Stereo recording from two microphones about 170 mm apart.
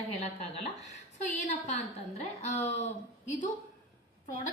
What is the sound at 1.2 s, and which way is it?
A woman's voice, 45° left (ahead or behind).